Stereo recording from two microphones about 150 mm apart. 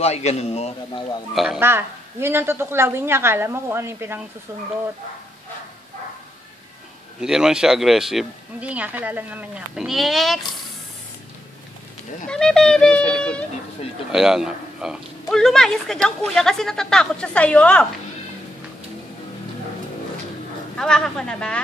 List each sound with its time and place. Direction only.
0.0 s a man's voice: 45° left (ahead or behind)
1.3 s a man's voice: centre (ahead or behind)
1.6 s a woman's voice: 15° right (ahead or behind)
7.2 s a man's voice: 5° right (ahead or behind)
12.3 s speech: 5° left (ahead or behind)
14.1 s a man's voice: 5° right (ahead or behind)
20.7 s a man's voice: 5° left (ahead or behind)